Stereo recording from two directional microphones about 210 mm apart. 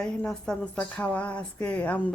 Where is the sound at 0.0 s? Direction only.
5° left (ahead or behind).